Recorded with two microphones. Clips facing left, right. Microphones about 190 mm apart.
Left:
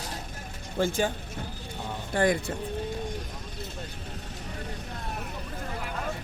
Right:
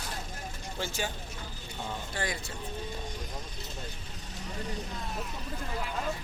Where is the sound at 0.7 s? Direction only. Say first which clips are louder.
Left 9 dB; 50° left (ahead or behind).